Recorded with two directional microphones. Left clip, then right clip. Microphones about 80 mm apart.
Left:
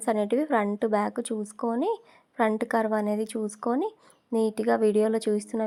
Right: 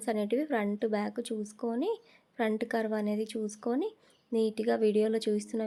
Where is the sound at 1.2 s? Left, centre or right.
Left.